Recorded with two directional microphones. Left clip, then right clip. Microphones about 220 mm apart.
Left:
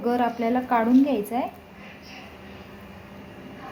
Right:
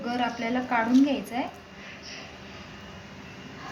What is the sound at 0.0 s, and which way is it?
A woman's voice, 35° left (ahead or behind).